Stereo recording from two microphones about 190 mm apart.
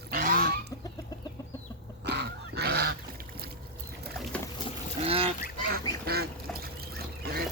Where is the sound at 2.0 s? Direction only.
60° right (ahead or behind).